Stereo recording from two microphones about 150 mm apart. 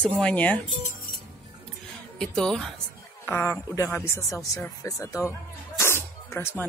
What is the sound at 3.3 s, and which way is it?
Speech, 15° left (ahead or behind).